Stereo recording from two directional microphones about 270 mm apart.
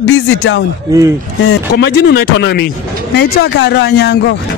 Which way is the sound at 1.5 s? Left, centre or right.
Left.